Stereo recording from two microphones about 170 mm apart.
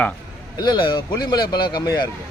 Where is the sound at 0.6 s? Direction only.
25° left (ahead or behind).